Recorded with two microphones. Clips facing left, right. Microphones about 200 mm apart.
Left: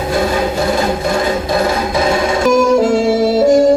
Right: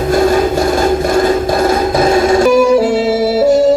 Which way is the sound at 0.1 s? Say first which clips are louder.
Right 5 dB; 45° right (ahead or behind).